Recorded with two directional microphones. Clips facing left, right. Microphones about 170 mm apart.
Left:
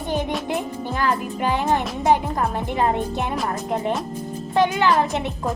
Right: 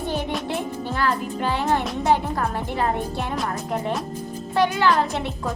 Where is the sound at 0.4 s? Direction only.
15° left (ahead or behind).